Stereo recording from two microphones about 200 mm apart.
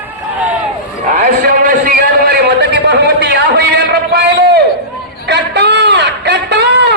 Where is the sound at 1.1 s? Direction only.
45° right (ahead or behind).